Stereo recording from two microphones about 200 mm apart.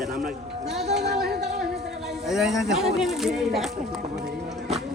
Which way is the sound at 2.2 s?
Centre (ahead or behind).